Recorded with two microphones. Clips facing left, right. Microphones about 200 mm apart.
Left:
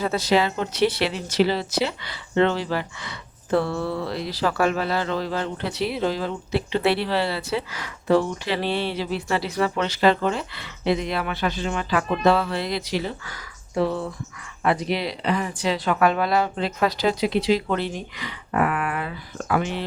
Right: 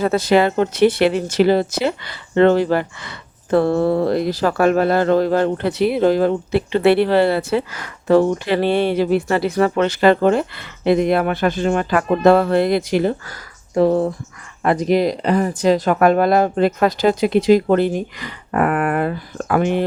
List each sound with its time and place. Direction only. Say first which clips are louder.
0.0 s speech: right 6 dB; 55° right (ahead or behind)